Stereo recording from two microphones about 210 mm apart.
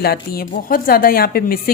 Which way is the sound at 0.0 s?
45° left (ahead or behind).